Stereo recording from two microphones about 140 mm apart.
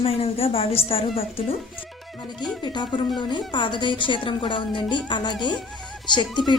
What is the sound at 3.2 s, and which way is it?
A woman's voice, 35° left (ahead or behind).